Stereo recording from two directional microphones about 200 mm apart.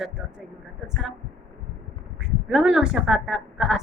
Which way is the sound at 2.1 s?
5° right (ahead or behind).